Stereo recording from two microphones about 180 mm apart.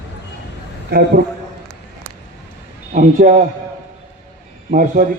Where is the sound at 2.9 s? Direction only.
45° right (ahead or behind).